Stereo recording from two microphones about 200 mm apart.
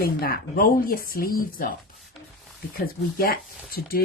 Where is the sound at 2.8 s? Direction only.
50° left (ahead or behind).